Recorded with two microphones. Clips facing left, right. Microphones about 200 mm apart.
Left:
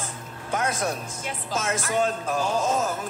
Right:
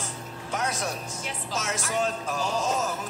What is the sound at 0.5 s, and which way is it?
Speech, 55° left (ahead or behind).